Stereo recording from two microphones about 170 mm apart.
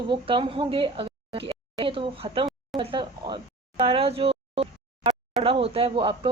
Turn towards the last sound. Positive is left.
turn(degrees=-30)  # may be behind; listen again after turning